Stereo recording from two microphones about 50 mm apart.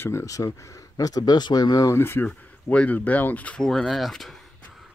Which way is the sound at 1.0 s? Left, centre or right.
Left.